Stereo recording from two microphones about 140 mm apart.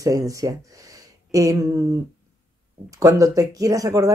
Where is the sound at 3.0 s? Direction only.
25° right (ahead or behind).